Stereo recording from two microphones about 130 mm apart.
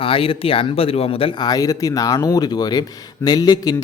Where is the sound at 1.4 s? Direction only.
30° left (ahead or behind).